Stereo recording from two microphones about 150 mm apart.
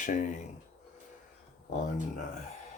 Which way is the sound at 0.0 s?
60° left (ahead or behind).